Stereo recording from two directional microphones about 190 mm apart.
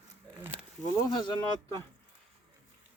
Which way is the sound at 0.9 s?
25° left (ahead or behind).